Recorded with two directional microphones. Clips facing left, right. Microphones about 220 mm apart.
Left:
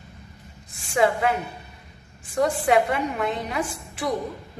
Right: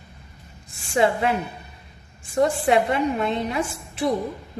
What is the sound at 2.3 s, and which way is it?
A woman's voice, 25° right (ahead or behind).